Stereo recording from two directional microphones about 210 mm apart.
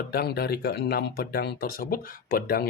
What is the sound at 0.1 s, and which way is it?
Speech, 50° left (ahead or behind).